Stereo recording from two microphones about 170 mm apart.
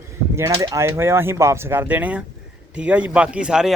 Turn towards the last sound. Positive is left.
turn(degrees=-5)  # may be behind; listen again after turning